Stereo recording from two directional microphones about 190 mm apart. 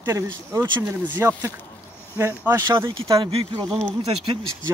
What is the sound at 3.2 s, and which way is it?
Speech, 25° right (ahead or behind).